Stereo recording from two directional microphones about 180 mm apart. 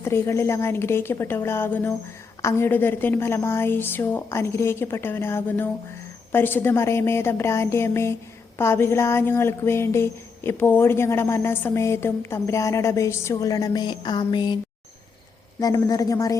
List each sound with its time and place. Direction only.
0.0 s speech: 15° left (ahead or behind)
15.6 s speech: 20° left (ahead or behind)